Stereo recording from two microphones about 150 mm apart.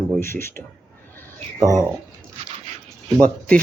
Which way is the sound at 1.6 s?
25° right (ahead or behind).